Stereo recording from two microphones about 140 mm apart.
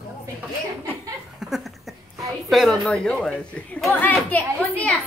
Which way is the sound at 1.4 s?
Centre (ahead or behind).